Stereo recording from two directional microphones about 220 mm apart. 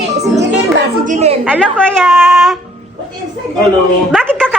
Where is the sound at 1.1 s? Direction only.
30° right (ahead or behind).